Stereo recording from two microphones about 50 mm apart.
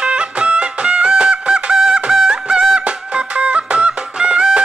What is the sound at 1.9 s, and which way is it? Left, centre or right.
Fowl, centre.